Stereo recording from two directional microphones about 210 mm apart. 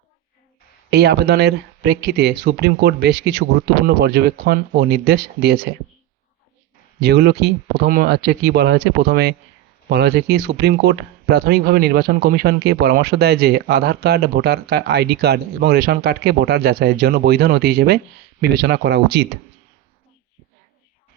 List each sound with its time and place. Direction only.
0.9 s speech: 50° right (ahead or behind)
7.0 s speech: 50° right (ahead or behind)